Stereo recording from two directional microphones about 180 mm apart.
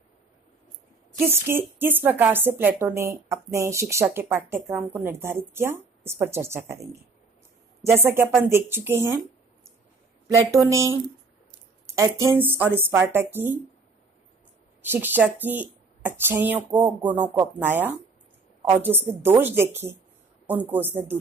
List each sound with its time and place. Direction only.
1.2 s a woman's voice: 10° right (ahead or behind)
7.8 s a woman's voice: 10° right (ahead or behind)
10.2 s a woman's voice: 15° right (ahead or behind)
11.8 s a sound: 15° right (ahead or behind)
12.2 s a woman's voice: 15° right (ahead or behind)
14.8 s a woman's voice: 10° right (ahead or behind)